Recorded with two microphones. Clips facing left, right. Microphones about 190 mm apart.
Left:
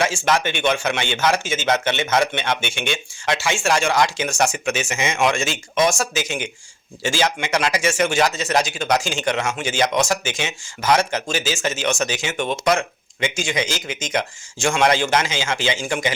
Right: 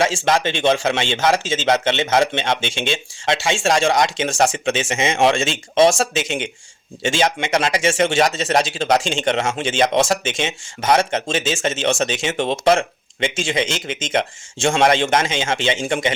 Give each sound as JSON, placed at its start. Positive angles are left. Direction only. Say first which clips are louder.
{"t": 0.3, "sound": "speech", "louder": "right 3 dB", "side_deg": -30}